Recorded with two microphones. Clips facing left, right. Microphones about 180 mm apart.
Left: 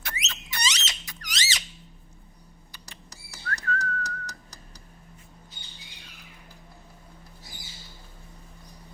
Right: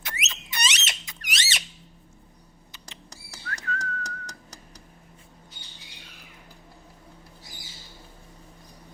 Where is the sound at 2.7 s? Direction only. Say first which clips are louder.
Right 2 dB; 20° right (ahead or behind).